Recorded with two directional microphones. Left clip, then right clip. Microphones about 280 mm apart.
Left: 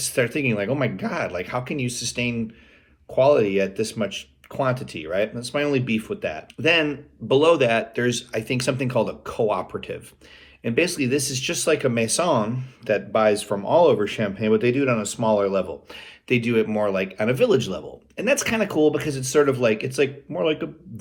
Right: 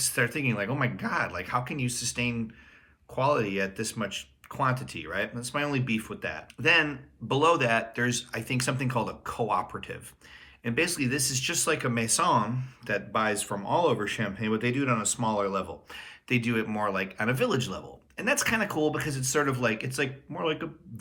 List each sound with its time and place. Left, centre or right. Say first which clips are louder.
0.3 s speech: left 6 dB; centre
1.8 s speech: left 5 dB; centre
3.1 s speech: left 9 dB; centre
11.2 s speech: left 3 dB; centre
11.4 s speech: left 7 dB; centre